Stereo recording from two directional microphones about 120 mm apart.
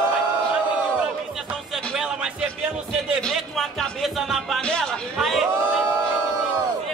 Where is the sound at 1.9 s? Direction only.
5° right (ahead or behind).